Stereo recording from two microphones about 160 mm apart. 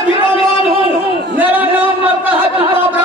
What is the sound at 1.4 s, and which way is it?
Speech, 10° right (ahead or behind).